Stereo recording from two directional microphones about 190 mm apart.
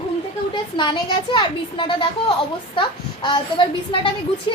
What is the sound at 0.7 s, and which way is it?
A woman's voice, 25° left (ahead or behind).